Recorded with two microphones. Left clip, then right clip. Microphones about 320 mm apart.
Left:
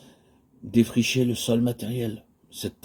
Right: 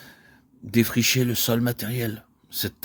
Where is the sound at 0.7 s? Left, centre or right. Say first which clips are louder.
Right 1 dB; right.